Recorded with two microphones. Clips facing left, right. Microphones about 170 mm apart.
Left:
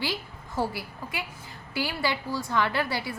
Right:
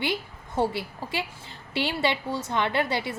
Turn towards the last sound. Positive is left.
turn(degrees=-20)  # may be behind; listen again after turning